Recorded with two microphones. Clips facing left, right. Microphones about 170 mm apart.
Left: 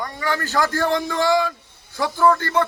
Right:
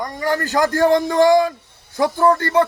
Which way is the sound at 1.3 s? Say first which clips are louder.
Right 5 dB; 20° right (ahead or behind).